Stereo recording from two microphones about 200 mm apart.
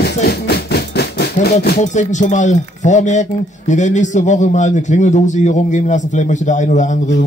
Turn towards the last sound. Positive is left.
turn(degrees=35)  # may be behind; listen again after turning